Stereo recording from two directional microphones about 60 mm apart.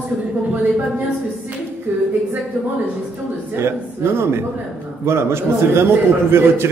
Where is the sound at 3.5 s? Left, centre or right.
Right.